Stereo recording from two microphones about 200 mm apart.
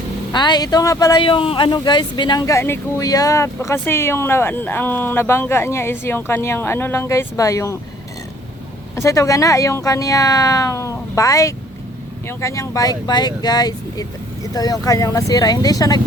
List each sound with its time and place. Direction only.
0.3 s speech: 20° left (ahead or behind)
9.0 s speech: 15° left (ahead or behind)